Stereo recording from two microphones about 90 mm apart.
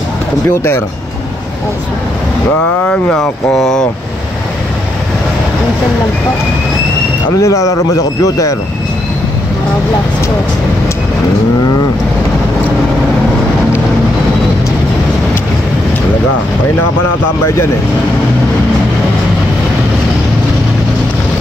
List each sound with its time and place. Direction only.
0.5 s speech: 30° left (ahead or behind)
2.8 s speech: 15° left (ahead or behind)
3.2 s speech: 5° left (ahead or behind)
7.4 s a man's voice: 35° left (ahead or behind)